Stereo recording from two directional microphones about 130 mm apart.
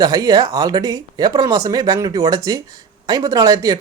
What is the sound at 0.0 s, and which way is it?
Speech, 30° right (ahead or behind).